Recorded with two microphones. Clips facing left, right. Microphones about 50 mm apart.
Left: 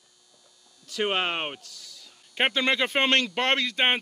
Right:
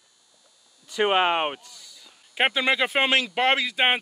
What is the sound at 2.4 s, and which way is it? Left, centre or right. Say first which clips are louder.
Speech: right 2 dB; centre.